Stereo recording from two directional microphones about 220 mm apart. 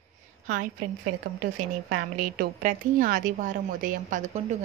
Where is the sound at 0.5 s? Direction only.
40° right (ahead or behind).